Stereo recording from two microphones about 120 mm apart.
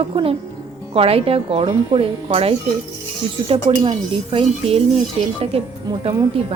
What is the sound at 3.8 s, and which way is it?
Speech, 45° right (ahead or behind).